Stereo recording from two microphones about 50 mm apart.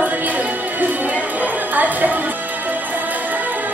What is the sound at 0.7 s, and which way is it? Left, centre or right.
Music, right.